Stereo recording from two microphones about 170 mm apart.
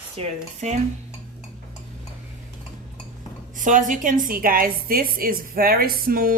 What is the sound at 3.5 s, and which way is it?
A woman's voice, 50° right (ahead or behind).